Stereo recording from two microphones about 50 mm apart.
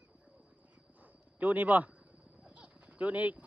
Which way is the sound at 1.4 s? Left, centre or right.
Right.